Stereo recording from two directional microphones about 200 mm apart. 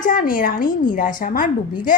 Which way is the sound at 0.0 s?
45° left (ahead or behind).